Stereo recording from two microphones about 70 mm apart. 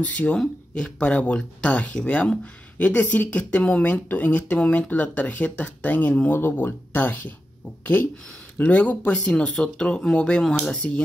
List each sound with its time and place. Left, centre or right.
0.0 s speech: centre